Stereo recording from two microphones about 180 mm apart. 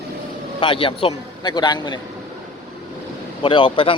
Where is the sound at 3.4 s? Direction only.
30° left (ahead or behind).